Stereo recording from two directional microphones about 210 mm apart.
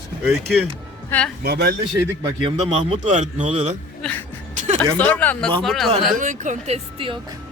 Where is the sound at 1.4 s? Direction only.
50° right (ahead or behind).